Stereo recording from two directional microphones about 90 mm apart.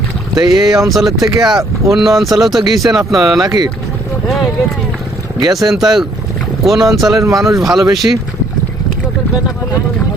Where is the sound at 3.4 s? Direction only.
50° right (ahead or behind).